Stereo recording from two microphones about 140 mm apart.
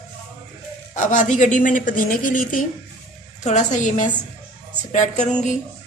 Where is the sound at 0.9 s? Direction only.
60° left (ahead or behind).